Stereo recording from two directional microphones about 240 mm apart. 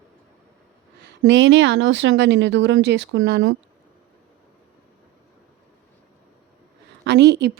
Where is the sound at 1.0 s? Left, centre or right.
Right.